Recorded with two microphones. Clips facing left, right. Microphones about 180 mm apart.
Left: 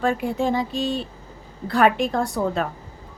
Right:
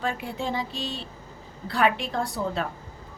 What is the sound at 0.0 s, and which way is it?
A woman's voice, 50° left (ahead or behind).